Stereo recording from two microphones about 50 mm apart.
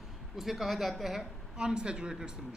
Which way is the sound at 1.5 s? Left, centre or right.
Centre.